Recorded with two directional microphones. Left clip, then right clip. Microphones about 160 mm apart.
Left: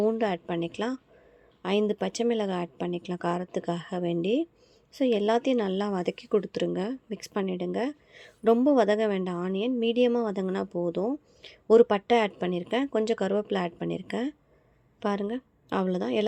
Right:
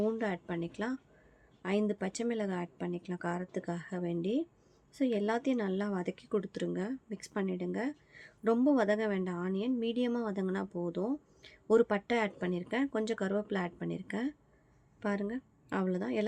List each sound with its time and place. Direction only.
0.0 s a woman's voice: 30° left (ahead or behind)